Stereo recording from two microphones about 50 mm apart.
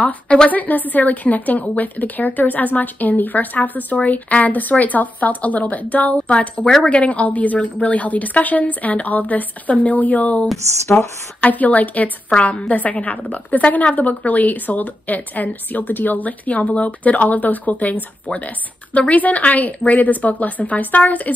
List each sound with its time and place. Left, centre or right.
0.5 s a woman's voice: left
18.9 s speech: left